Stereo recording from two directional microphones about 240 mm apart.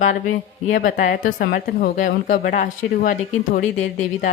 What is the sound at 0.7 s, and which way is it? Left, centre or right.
A woman's voice, left.